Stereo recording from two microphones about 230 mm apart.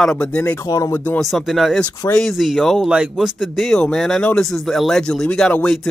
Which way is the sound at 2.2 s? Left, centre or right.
Centre.